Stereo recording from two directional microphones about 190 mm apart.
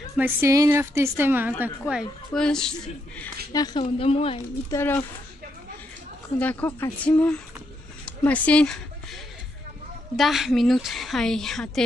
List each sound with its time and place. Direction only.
0.2 s a woman's voice: 15° right (ahead or behind); by 3.3 s 5° left (ahead or behind)
3.5 s a woman's voice: 20° left (ahead or behind)
4.6 s speech: 15° left (ahead or behind)
6.4 s a woman's voice: 10° left (ahead or behind)